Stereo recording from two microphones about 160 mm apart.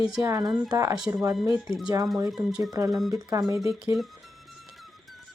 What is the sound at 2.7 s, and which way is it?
Speech, 20° right (ahead or behind).